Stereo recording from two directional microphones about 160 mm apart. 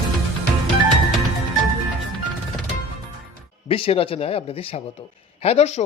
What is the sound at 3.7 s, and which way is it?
A man's voice, 35° left (ahead or behind).